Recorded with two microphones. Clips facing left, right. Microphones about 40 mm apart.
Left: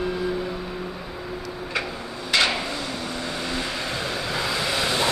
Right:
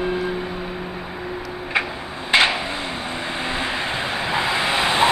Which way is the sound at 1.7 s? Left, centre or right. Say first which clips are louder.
Right 6 dB; right.